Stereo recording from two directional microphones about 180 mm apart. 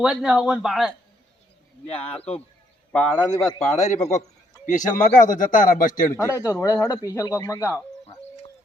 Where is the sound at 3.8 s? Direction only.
40° left (ahead or behind).